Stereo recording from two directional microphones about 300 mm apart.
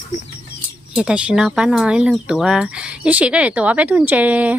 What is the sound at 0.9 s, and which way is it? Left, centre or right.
Speech, centre.